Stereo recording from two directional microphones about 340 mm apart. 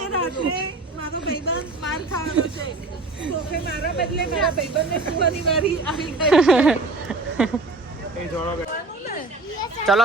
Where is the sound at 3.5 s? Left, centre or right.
Left.